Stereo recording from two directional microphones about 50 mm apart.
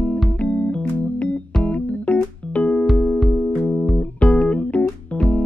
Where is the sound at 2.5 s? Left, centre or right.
Left.